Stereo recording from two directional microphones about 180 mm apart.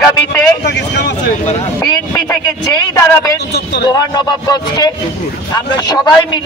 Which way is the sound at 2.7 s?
20° left (ahead or behind).